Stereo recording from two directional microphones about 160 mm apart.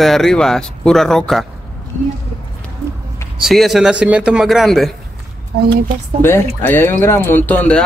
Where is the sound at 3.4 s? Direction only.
Centre (ahead or behind).